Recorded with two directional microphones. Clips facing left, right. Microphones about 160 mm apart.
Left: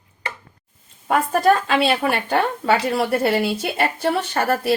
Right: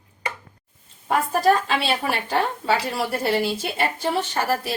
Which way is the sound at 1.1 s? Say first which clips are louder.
Left 2 dB; 55° left (ahead or behind).